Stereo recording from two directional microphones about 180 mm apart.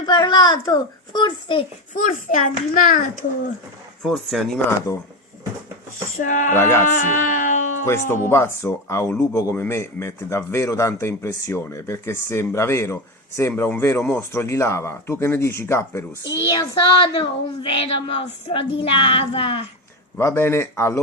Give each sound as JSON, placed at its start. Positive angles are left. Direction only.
{"t": 0.0, "sound": "a woman's voice", "side_deg": 25}
{"t": 1.9, "sound": "a child's voice", "side_deg": 45}
{"t": 4.0, "sound": "speech", "side_deg": 0}
{"t": 4.9, "sound": "speech", "side_deg": 20}
{"t": 6.1, "sound": "a child's voice", "side_deg": 45}
{"t": 6.6, "sound": "speech", "side_deg": 15}
{"t": 6.8, "sound": "speech", "side_deg": 45}
{"t": 7.9, "sound": "speech", "side_deg": 15}
{"t": 16.5, "sound": "speech", "side_deg": 25}
{"t": 18.8, "sound": "child singing", "side_deg": 30}
{"t": 20.1, "sound": "speech", "side_deg": 15}